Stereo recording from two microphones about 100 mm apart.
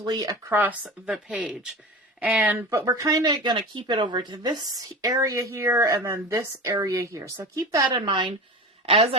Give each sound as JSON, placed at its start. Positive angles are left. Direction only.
{"t": 0.0, "sound": "speech", "side_deg": -40}
{"t": 0.4, "sound": "speech", "side_deg": -20}
{"t": 0.9, "sound": "speech", "side_deg": 0}
{"t": 2.6, "sound": "speech", "side_deg": -35}
{"t": 7.9, "sound": "speech", "side_deg": -55}